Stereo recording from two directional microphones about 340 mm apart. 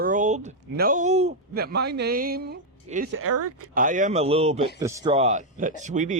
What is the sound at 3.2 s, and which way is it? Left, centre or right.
Speech, right.